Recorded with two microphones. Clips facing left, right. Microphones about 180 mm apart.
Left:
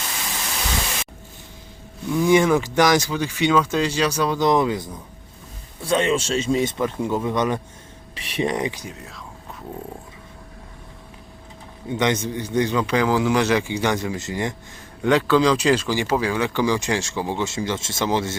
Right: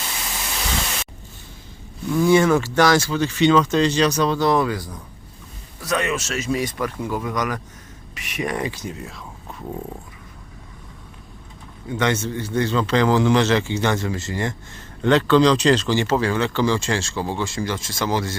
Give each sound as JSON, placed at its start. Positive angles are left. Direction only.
{"t": 2.0, "sound": "speech", "side_deg": 10}
{"t": 8.9, "sound": "speech", "side_deg": 0}
{"t": 11.9, "sound": "speech", "side_deg": 15}
{"t": 15.0, "sound": "speech", "side_deg": 5}